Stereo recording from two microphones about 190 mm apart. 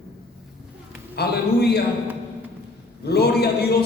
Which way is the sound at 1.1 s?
55° left (ahead or behind).